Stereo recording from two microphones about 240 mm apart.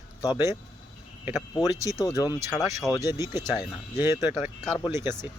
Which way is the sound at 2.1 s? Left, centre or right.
Centre.